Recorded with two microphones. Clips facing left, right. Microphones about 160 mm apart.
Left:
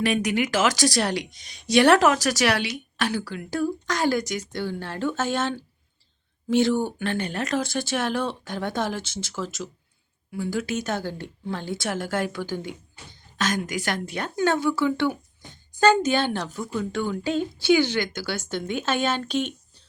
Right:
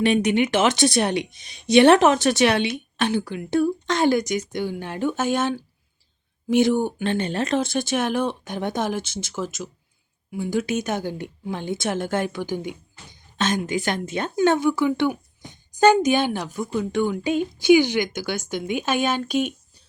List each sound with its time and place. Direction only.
0.0 s a woman's voice: 25° right (ahead or behind); by 19.5 s 10° right (ahead or behind)